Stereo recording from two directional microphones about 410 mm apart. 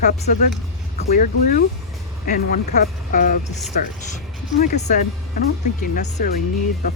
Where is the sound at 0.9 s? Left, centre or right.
Centre.